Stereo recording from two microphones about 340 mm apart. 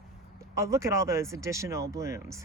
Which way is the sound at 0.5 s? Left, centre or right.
Centre.